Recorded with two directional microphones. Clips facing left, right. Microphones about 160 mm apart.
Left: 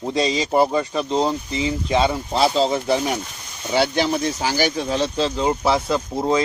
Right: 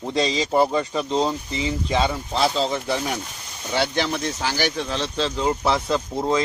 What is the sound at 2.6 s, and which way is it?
Speech, 35° left (ahead or behind).